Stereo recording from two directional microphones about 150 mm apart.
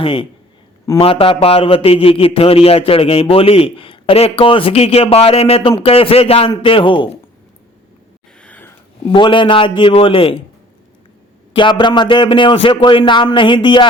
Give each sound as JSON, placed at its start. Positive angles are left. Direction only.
{"t": 0.0, "sound": "a man's voice", "side_deg": 35}
{"t": 8.4, "sound": "a sound", "side_deg": 10}
{"t": 9.1, "sound": "a man's voice", "side_deg": 35}
{"t": 11.5, "sound": "a man's voice", "side_deg": 30}